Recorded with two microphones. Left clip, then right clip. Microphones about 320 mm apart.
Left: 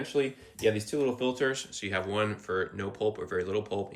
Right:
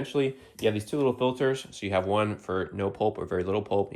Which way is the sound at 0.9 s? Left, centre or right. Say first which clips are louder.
Right 3 dB; centre.